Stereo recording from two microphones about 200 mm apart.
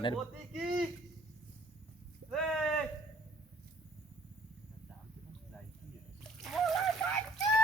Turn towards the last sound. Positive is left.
turn(degrees=5)  # may be behind; listen again after turning